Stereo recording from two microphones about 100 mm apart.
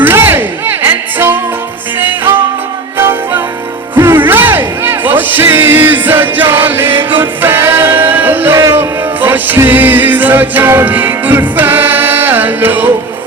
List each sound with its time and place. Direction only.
0.0 s music: 20° right (ahead or behind)